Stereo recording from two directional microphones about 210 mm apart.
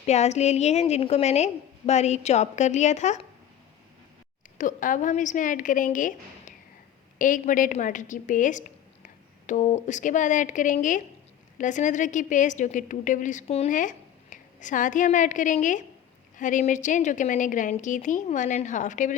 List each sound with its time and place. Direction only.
0.0 s a woman's voice: 30° left (ahead or behind)
4.5 s a woman's voice: 40° left (ahead or behind)